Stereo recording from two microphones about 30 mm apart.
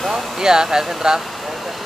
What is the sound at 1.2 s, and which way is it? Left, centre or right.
Vehicle, centre.